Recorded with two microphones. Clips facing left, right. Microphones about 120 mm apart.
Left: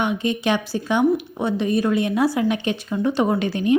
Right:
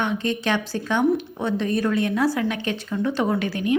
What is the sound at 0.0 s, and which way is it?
Speech, 10° left (ahead or behind).